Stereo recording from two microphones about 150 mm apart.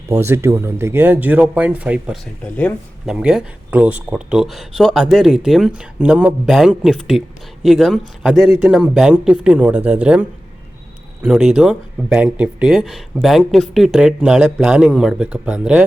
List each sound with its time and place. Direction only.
0.1 s speech: 15° right (ahead or behind)
2.4 s speech: 10° left (ahead or behind)
3.1 s speech: 5° right (ahead or behind)